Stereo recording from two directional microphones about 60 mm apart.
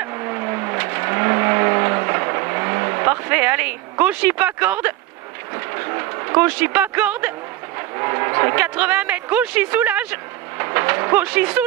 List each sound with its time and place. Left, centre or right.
0.0 s vehicle: right
4.0 s speech: right
5.9 s vehicle: right
6.3 s speech: right
8.0 s a sound: right